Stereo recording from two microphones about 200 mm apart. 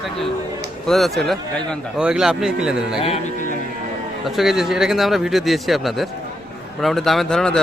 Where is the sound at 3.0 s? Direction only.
30° left (ahead or behind).